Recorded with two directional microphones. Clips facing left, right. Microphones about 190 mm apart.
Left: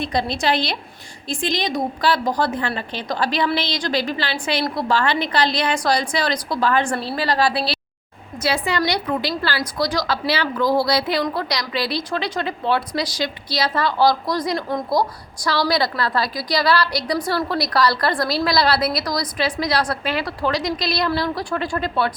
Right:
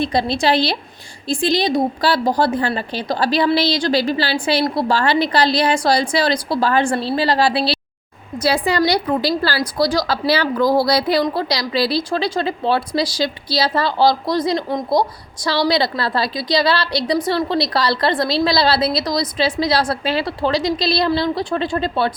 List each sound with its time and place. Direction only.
0.0 s a woman's voice: 30° right (ahead or behind)